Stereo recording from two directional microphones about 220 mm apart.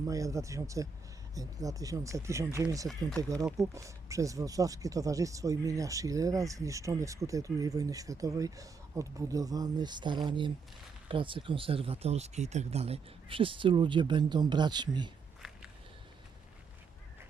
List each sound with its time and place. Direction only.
0.0 s speech: 15° right (ahead or behind)
15.4 s walk: centre (ahead or behind)